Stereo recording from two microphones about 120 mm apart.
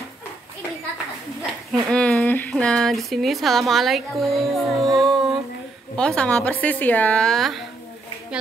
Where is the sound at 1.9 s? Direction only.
10° left (ahead or behind).